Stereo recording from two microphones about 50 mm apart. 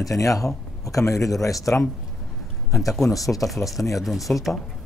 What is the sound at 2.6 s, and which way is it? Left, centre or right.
Speech, left.